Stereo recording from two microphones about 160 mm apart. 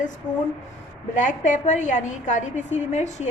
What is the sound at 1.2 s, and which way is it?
A woman's voice, 50° left (ahead or behind).